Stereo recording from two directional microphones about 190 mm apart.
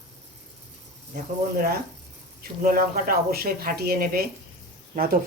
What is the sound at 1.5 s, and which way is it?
Speech, 50° right (ahead or behind).